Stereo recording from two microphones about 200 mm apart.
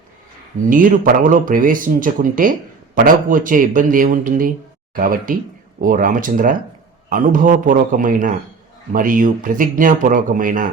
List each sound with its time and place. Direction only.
0.7 s speech: 45° right (ahead or behind)